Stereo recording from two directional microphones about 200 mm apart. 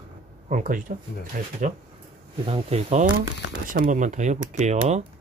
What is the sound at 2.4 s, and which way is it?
Speech, 30° right (ahead or behind).